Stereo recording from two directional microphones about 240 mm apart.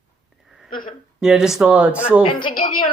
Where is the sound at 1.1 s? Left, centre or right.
Centre.